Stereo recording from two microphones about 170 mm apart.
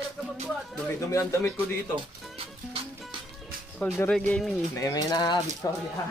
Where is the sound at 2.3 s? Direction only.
30° right (ahead or behind).